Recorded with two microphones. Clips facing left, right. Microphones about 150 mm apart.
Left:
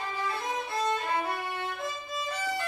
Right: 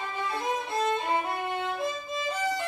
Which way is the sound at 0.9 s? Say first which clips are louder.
Right 2 dB; 25° right (ahead or behind).